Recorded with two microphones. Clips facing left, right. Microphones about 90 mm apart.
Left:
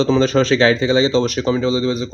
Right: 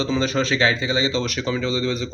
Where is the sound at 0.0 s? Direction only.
35° left (ahead or behind).